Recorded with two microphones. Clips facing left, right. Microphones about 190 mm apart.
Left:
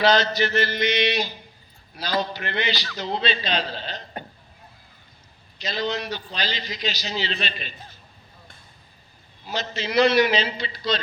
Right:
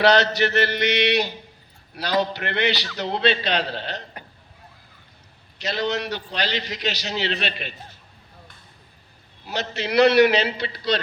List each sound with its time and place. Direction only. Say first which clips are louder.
0.0 s a man's voice: right 2 dB; 70° right (ahead or behind)
5.6 s a man's voice: right 2 dB; 70° right (ahead or behind)
9.5 s a man's voice: right 2 dB; 65° right (ahead or behind)